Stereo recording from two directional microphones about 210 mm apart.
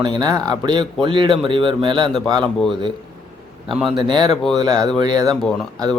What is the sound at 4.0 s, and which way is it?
Speech, 20° right (ahead or behind).